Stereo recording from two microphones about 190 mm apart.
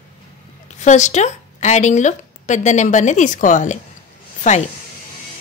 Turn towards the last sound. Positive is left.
turn(degrees=40)  # may be behind; listen again after turning